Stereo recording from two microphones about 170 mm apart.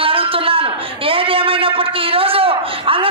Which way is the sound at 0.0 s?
30° right (ahead or behind).